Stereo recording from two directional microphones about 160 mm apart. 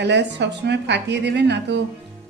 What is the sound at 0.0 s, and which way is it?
Speech, 90° right.